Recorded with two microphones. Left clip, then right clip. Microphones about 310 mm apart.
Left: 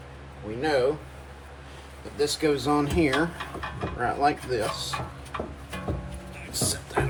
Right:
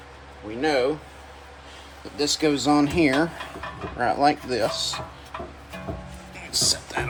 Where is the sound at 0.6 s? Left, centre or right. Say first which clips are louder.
Right 2 dB; right.